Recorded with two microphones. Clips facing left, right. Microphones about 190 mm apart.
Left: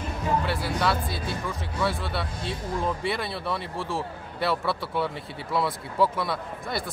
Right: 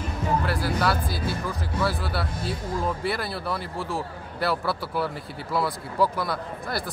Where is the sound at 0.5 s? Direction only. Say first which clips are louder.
Right 1 dB; centre (ahead or behind).